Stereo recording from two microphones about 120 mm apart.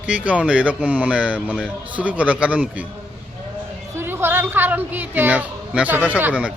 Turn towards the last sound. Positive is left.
turn(degrees=-10)  # may be behind; listen again after turning